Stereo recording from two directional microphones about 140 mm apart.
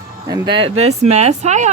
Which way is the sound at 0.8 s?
50° right (ahead or behind).